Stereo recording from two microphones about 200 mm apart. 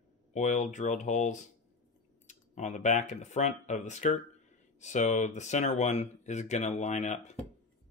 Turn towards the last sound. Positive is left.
turn(degrees=35)  # may be behind; listen again after turning